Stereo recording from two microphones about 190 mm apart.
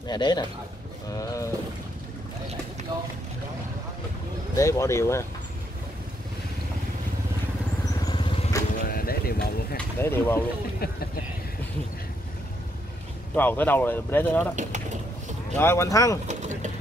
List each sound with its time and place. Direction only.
0.1 s a man's voice: 20° left (ahead or behind)
1.1 s a sound: 20° left (ahead or behind)
4.6 s speech: 15° left (ahead or behind)
8.0 s vehicle: 25° left (ahead or behind)
8.8 s a sound: 50° left (ahead or behind)
9.8 s speech: 10° left (ahead or behind)
10.8 s speech: 55° left (ahead or behind)
13.4 s speech: 10° left (ahead or behind)
14.5 s vehicle: 40° right (ahead or behind)
15.5 s speech: 15° left (ahead or behind)
16.3 s mechanisms: 40° right (ahead or behind)